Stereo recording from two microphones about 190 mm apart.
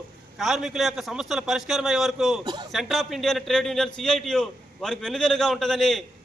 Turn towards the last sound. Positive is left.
turn(degrees=0)  # may be behind; listen again after turning